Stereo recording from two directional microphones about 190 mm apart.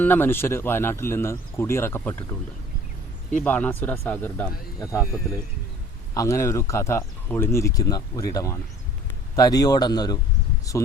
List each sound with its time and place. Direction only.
0.0 s speech: 10° left (ahead or behind)
3.3 s speech: 10° left (ahead or behind)
6.1 s speech: 15° left (ahead or behind)